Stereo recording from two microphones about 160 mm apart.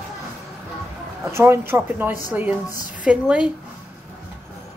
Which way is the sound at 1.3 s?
15° right (ahead or behind).